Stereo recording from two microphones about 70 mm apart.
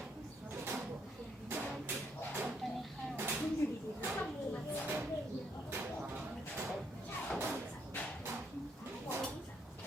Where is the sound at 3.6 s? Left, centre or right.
Left.